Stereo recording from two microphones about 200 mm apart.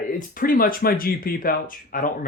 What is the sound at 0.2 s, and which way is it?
Speech, 45° left (ahead or behind).